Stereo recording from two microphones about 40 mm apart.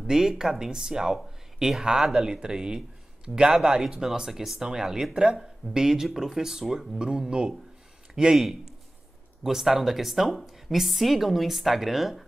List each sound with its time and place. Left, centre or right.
0.0 s speech: centre